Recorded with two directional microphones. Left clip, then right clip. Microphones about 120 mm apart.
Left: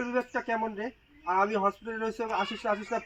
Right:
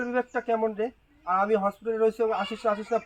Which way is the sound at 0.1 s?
50° right (ahead or behind).